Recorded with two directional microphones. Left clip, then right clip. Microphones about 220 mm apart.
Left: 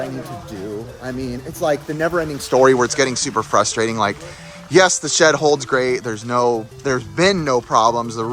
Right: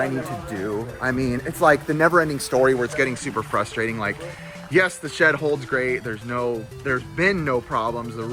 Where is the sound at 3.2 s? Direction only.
15° left (ahead or behind).